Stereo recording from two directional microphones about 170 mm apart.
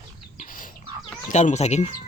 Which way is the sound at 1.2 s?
45° left (ahead or behind).